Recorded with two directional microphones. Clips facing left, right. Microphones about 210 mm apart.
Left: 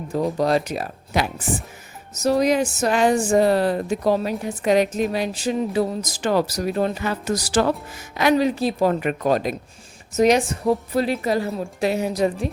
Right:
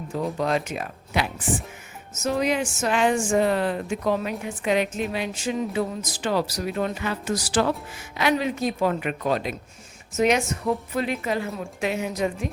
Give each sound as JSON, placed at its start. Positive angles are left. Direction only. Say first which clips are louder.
{"t": 0.1, "sound": "speech", "louder": "left 5 dB", "side_deg": 40}